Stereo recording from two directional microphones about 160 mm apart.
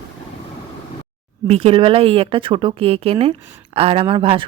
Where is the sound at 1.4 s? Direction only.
40° right (ahead or behind).